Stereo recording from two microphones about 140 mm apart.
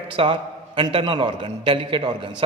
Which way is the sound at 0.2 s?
40° right (ahead or behind).